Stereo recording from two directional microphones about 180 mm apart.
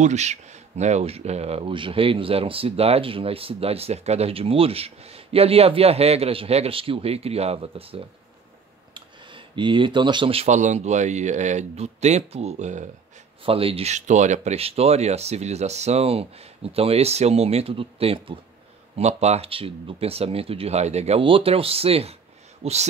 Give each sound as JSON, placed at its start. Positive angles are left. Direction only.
{"t": 0.0, "sound": "speech", "side_deg": -40}